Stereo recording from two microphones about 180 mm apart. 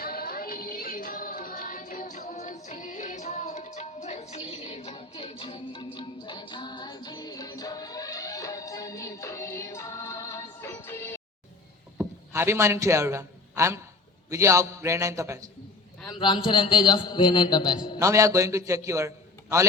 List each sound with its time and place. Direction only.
0.0 s music: 55° left (ahead or behind); by 11.2 s 15° left (ahead or behind)
11.9 s a sound: 15° right (ahead or behind)
14.3 s a man's voice: 15° right (ahead or behind)
16.0 s a man's voice: 25° left (ahead or behind)
18.0 s a man's voice: 15° right (ahead or behind)